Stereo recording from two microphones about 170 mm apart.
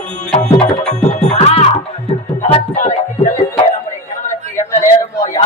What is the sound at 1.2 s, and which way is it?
Music, 40° left (ahead or behind).